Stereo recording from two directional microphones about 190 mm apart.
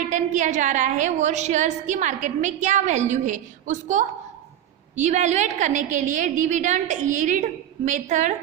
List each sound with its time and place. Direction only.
0.1 s a woman's voice: 40° right (ahead or behind)
5.0 s a woman's voice: 40° right (ahead or behind)